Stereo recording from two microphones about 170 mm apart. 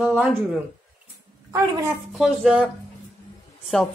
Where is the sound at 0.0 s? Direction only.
5° right (ahead or behind).